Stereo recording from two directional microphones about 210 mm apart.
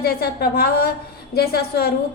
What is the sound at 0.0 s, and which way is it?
A woman's voice, 45° left (ahead or behind).